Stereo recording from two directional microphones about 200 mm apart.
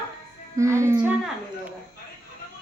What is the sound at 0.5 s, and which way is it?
Speech, 15° right (ahead or behind).